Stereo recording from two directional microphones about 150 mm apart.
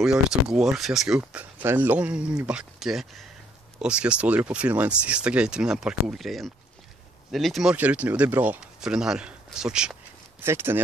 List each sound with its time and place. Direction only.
0.0 s speech: 5° right (ahead or behind)
10.4 s speech: 15° right (ahead or behind)